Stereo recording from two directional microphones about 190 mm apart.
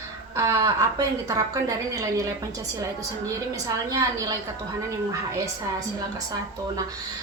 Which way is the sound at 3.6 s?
15° right (ahead or behind).